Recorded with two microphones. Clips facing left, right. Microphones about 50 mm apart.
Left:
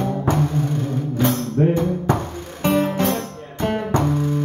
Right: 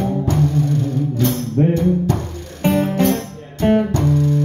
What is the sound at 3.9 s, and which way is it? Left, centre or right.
Music, left.